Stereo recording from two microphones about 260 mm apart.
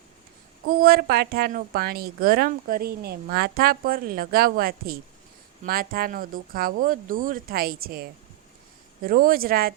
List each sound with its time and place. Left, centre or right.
0.8 s a woman's voice: right